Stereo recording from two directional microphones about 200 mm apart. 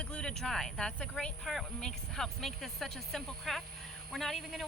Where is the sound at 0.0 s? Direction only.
5° left (ahead or behind).